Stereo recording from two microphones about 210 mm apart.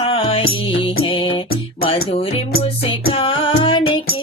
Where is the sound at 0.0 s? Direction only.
25° left (ahead or behind).